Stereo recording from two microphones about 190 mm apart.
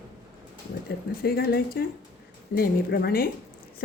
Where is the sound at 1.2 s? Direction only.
55° left (ahead or behind).